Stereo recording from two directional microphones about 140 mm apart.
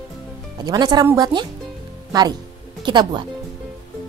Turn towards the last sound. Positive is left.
turn(degrees=-35)  # may be behind; listen again after turning